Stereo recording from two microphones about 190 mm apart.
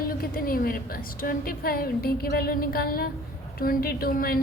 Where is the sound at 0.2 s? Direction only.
50° left (ahead or behind).